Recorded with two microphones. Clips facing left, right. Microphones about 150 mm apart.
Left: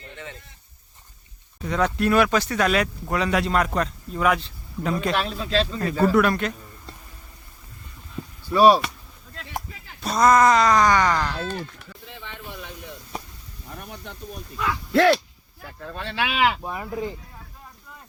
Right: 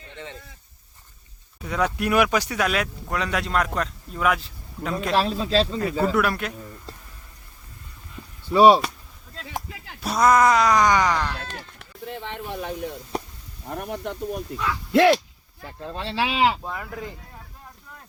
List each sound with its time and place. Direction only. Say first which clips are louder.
1.6 s speech: left 2 dB; 5° right (ahead or behind)
5.1 s a man's voice: right 3 dB; 30° right (ahead or behind)
5.8 s speech: left 3 dB; 10° right (ahead or behind)
8.4 s speech: right 1 dB; 20° right (ahead or behind)
10.0 s speech: left 1 dB; 10° right (ahead or behind)
12.0 s speech: right 7 dB; 60° right (ahead or behind)
14.9 s speech: right 1 dB; 15° right (ahead or behind)
16.6 s speech: left 2 dB; 20° left (ahead or behind)